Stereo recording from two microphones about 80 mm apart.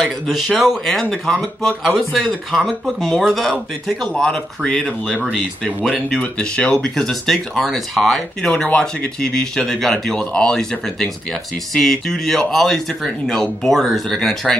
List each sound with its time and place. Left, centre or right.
0.0 s speech: centre